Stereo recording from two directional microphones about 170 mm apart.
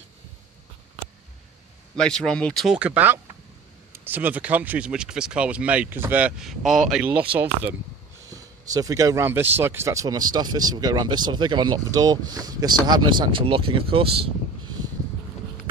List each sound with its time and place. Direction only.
2.0 s speech: 5° left (ahead or behind)
8.3 s speech: 20° right (ahead or behind)